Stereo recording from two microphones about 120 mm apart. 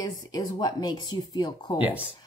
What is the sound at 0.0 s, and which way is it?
A woman's voice, 35° left (ahead or behind).